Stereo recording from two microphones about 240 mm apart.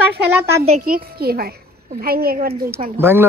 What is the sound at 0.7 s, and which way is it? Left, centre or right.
A child's voice, right.